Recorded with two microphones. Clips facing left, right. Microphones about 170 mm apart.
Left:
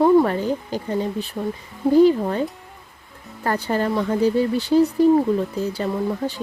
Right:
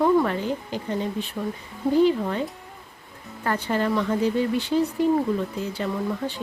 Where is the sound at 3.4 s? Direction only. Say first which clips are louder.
Left 2 dB; 40° left (ahead or behind).